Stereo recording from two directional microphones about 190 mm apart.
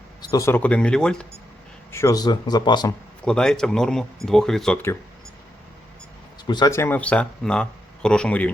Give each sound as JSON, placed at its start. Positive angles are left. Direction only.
{"t": 0.3, "sound": "speech", "side_deg": 15}
{"t": 1.9, "sound": "speech", "side_deg": 15}
{"t": 3.2, "sound": "speech", "side_deg": 5}
{"t": 6.5, "sound": "speech", "side_deg": 20}